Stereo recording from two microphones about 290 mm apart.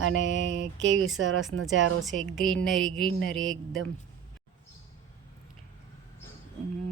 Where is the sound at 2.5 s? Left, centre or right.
Centre.